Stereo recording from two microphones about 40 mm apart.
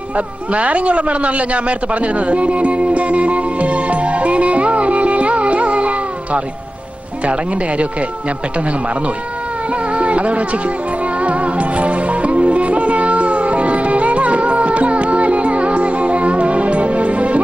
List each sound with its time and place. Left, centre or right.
0.2 s a man's voice: right
9.9 s speech: right
11.2 s music: right